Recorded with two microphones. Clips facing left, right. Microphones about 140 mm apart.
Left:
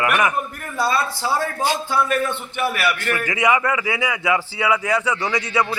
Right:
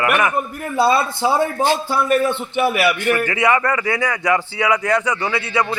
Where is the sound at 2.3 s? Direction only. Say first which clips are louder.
Right 5 dB; 20° right (ahead or behind).